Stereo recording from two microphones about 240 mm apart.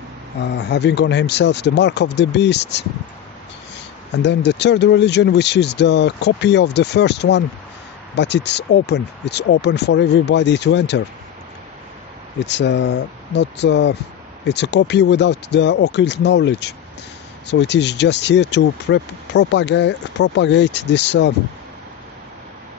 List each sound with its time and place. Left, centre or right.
0.4 s speech: left
4.1 s speech: left
12.4 s speech: left